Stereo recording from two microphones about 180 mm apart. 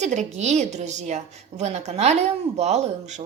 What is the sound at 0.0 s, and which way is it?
A woman's voice, 40° right (ahead or behind).